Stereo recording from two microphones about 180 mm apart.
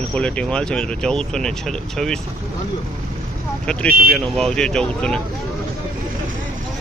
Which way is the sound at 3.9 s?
55° right (ahead or behind).